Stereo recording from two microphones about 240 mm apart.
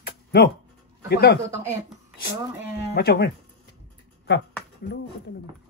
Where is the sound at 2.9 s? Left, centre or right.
Left.